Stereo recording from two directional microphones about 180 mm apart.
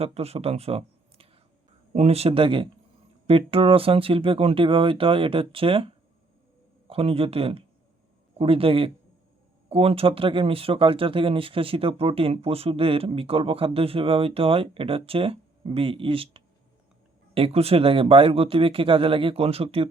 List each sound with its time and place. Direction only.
0.0 s speech: 35° right (ahead or behind)